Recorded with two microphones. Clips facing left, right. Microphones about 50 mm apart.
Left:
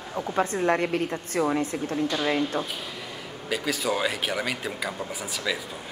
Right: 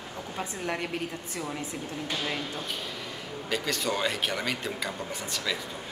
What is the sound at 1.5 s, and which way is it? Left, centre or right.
Speech, left.